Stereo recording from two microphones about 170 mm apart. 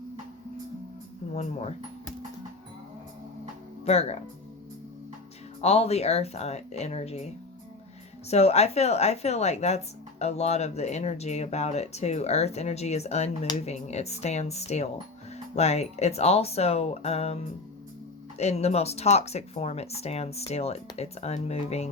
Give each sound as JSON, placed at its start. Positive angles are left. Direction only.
{"t": 3.8, "sound": "speech", "side_deg": 40}
{"t": 5.6, "sound": "speech", "side_deg": 40}
{"t": 8.3, "sound": "speech", "side_deg": 40}